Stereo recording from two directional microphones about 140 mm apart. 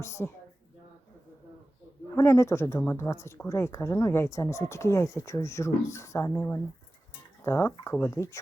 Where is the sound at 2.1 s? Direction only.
20° left (ahead or behind).